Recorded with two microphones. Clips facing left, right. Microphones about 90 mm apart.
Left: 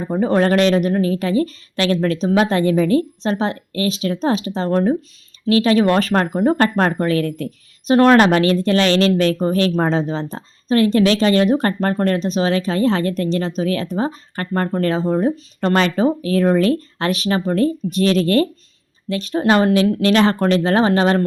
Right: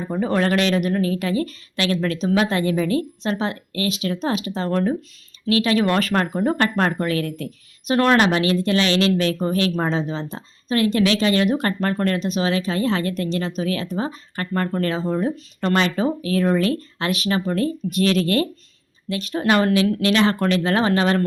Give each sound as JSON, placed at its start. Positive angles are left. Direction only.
{"t": 0.1, "sound": "speech", "side_deg": 35}